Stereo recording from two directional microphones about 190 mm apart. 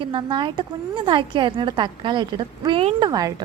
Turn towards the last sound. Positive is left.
turn(degrees=-20)  # may be behind; listen again after turning